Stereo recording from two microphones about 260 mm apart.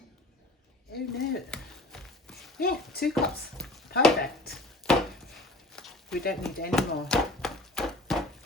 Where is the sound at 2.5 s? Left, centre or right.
Left.